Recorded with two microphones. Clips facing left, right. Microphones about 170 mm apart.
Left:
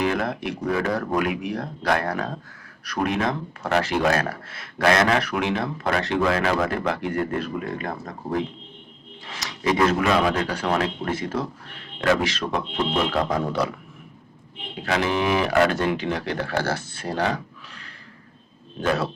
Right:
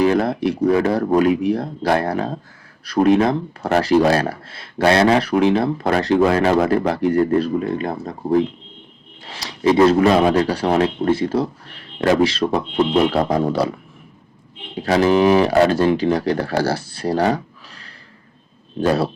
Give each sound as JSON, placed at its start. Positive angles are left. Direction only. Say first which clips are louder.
{"t": 0.0, "sound": "speech", "louder": "right 8 dB", "side_deg": -35}
{"t": 14.8, "sound": "speech", "louder": "right 9 dB", "side_deg": -35}